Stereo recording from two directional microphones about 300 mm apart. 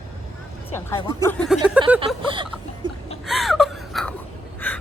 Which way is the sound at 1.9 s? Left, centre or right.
Centre.